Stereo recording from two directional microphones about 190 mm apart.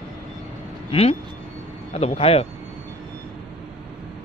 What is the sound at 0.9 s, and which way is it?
Speech, 30° left (ahead or behind).